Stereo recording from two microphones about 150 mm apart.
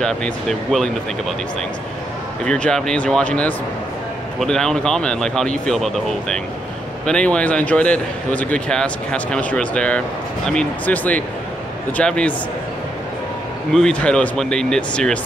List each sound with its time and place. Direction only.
0.0 s speech: 5° left (ahead or behind)
2.4 s a man's voice: 5° left (ahead or behind)
13.7 s speech: 5° left (ahead or behind)